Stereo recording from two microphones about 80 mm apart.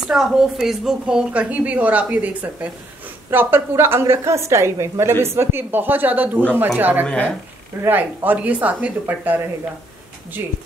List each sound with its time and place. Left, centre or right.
0.1 s a woman's voice: centre; by 7.1 s right
7.1 s speech: centre
7.8 s a woman's voice: right